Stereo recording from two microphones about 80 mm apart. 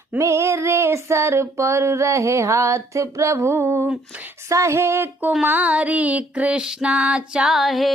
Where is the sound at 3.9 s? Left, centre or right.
Centre.